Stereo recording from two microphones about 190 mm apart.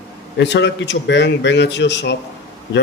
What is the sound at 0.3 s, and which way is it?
A man's voice, 65° left (ahead or behind).